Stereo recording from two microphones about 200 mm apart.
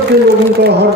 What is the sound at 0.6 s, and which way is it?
Speech, 55° right (ahead or behind).